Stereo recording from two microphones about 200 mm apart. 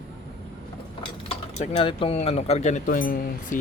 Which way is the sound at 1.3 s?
30° left (ahead or behind).